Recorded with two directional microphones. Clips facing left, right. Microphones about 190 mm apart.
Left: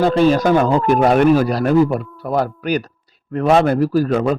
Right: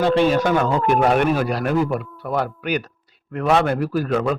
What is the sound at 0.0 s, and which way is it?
A man's voice, 40° left (ahead or behind).